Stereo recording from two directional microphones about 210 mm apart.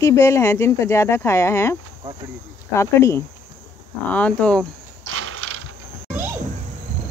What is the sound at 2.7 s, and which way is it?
Speech, 15° left (ahead or behind).